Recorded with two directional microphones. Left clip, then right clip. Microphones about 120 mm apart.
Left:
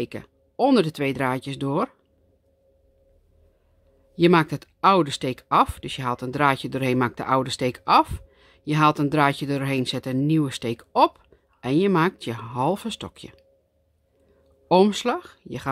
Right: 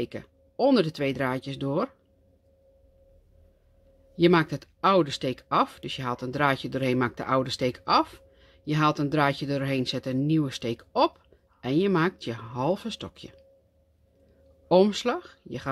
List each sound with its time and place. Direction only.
0.0 s speech: 45° left (ahead or behind)
4.1 s speech: 45° left (ahead or behind)
14.7 s speech: 45° left (ahead or behind)